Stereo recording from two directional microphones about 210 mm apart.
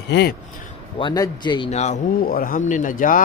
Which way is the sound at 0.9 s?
20° left (ahead or behind).